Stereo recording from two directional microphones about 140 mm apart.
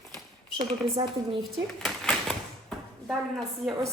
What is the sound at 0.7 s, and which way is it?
Speech, 40° right (ahead or behind).